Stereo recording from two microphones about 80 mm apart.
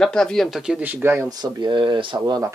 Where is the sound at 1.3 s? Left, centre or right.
Right.